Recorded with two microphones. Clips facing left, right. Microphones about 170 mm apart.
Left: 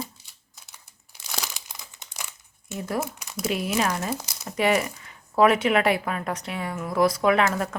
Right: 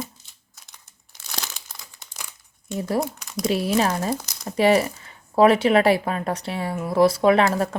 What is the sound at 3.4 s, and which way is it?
Speech, 35° right (ahead or behind).